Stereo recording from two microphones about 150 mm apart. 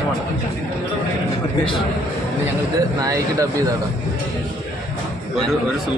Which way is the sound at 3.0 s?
25° right (ahead or behind).